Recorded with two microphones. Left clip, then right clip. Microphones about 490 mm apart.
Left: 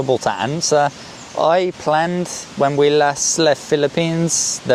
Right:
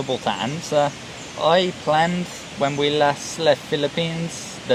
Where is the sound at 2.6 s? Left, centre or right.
Left.